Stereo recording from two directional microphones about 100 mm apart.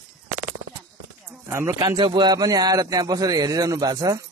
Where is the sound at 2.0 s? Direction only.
60° right (ahead or behind).